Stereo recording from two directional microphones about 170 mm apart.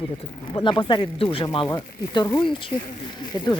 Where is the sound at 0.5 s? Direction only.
30° left (ahead or behind).